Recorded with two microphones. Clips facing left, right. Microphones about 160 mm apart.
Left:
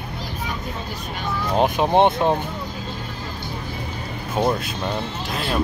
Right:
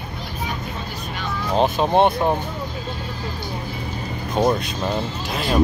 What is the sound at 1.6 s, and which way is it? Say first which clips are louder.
Speech: even; 15° left (ahead or behind).